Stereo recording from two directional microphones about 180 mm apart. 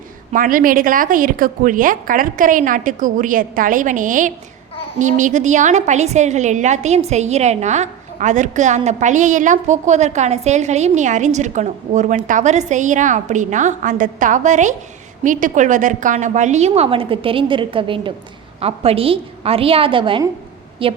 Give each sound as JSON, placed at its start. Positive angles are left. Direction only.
{"t": 0.3, "sound": "a woman's voice", "side_deg": -50}